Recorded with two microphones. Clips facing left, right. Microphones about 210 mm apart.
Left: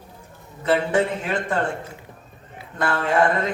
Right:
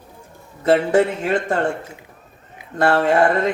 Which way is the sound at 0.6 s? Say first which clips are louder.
Right 5 dB; 40° right (ahead or behind).